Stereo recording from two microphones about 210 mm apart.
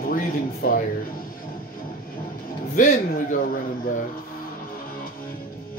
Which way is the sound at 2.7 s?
40° left (ahead or behind).